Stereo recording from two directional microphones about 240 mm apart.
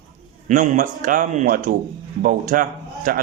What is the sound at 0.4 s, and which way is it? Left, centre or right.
A man's voice, right.